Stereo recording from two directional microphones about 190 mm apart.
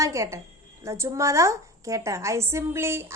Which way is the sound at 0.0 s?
15° right (ahead or behind).